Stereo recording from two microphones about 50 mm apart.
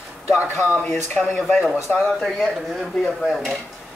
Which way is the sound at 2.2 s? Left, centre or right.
Centre.